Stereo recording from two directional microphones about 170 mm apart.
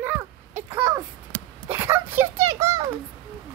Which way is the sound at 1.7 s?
15° right (ahead or behind).